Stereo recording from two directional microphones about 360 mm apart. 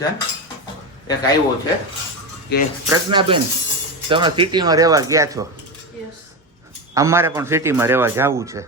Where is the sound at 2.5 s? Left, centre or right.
Left.